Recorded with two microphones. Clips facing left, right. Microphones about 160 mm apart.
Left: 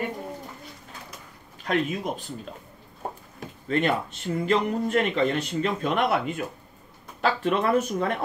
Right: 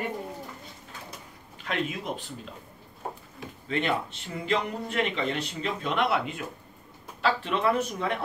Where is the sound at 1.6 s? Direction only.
40° left (ahead or behind).